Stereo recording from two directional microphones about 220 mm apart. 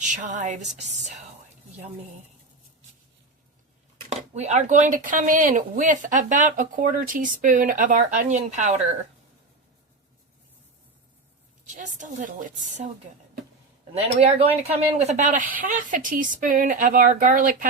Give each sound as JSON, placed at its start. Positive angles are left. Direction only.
{"t": 0.0, "sound": "speech", "side_deg": -35}
{"t": 4.1, "sound": "speech", "side_deg": -30}
{"t": 11.7, "sound": "speech", "side_deg": -35}
{"t": 13.9, "sound": "speech", "side_deg": -25}